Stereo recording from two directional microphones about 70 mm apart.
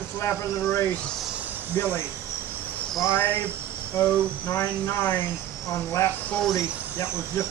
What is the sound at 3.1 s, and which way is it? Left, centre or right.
Speech, left.